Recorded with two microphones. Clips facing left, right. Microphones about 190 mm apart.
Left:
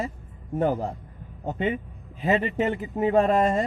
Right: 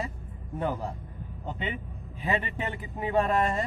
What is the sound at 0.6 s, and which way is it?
Speech, 45° left (ahead or behind).